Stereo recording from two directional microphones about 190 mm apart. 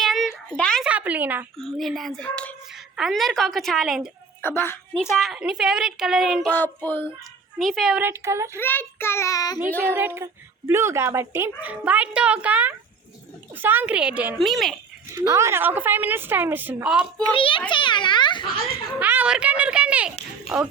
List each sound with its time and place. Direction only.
0.0 s a sound: centre (ahead or behind)
0.9 s a sound: 5° right (ahead or behind)
1.5 s speech: centre (ahead or behind)
4.4 s child singing: 10° left (ahead or behind)
5.1 s speech: centre (ahead or behind)
6.5 s child singing: 10° left (ahead or behind)
7.6 s speech: centre (ahead or behind)
8.5 s child singing: 10° left (ahead or behind)
9.6 s speech: 10° right (ahead or behind)
15.1 s speech: 15° right (ahead or behind)
17.3 s a child's voice: 30° left (ahead or behind)
18.9 s speech: 10° right (ahead or behind)